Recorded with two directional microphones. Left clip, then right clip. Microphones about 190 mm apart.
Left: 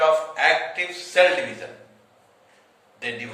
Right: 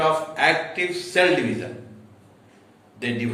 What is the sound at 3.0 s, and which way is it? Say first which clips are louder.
Speech: right 2 dB; 15° right (ahead or behind).